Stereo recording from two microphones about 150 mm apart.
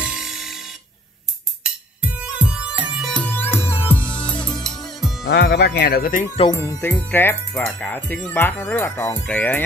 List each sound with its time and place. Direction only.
0.0 s music: 5° right (ahead or behind)
2.0 s music: 10° right (ahead or behind)
3.1 s music: 10° left (ahead or behind)
5.3 s speech: 90° left
6.6 s speech: 15° left (ahead or behind)